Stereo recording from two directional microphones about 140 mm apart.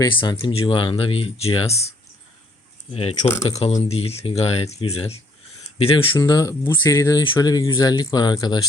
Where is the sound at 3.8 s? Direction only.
45° left (ahead or behind).